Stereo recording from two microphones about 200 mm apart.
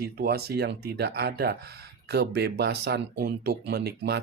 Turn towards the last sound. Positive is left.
turn(degrees=-55)  # may be behind; listen again after turning